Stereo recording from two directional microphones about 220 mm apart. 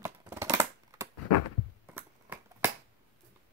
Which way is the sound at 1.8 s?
10° right (ahead or behind).